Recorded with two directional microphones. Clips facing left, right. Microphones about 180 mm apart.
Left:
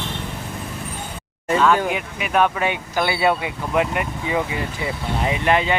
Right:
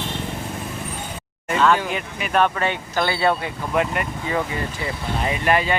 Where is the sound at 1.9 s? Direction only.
5° left (ahead or behind).